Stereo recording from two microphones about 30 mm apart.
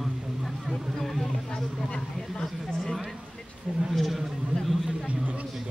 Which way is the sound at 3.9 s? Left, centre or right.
Centre.